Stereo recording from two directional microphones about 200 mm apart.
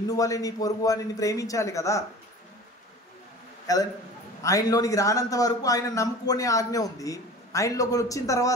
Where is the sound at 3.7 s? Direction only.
15° left (ahead or behind).